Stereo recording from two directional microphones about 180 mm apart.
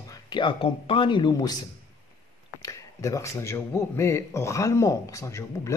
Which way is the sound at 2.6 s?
15° left (ahead or behind).